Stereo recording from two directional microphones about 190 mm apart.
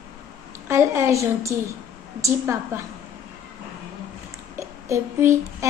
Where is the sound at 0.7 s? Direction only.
15° right (ahead or behind).